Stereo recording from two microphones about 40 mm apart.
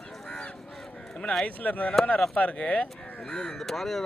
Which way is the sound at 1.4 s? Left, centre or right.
Left.